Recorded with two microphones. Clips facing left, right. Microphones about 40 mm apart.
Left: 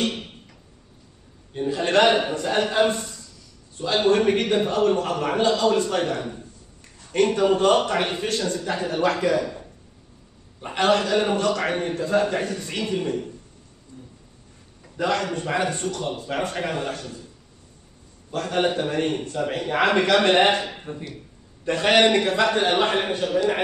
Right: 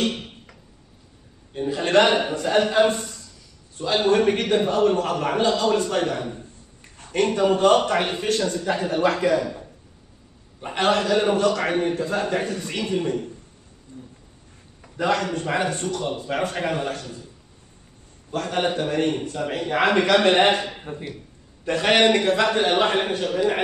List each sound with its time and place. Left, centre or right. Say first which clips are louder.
0.0 s music: right 1 dB; centre
1.5 s a man's voice: right 1 dB; centre
13.9 s a sound: right 2 dB; right
15.0 s a man's voice: right 1 dB; centre
18.3 s a man's voice: left 1 dB; centre